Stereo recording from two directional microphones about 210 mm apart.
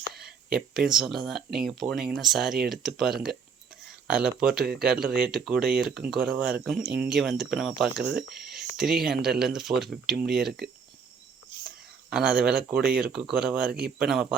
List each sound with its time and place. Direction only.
0.2 s speech: 5° right (ahead or behind)
12.1 s speech: 5° right (ahead or behind)
12.7 s a man's voice: 45° right (ahead or behind)
13.0 s speech: 5° right (ahead or behind)
13.7 s a man's voice: 50° right (ahead or behind)
14.1 s speech: centre (ahead or behind)